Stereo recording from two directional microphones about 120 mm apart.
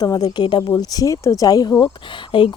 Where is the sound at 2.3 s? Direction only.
50° left (ahead or behind).